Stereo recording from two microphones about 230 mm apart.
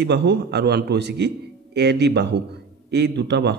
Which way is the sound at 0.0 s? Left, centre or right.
Right.